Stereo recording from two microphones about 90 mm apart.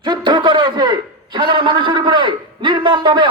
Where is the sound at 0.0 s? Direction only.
60° right (ahead or behind).